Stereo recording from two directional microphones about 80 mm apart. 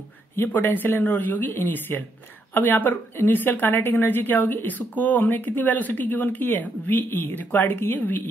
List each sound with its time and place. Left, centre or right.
0.4 s speech: left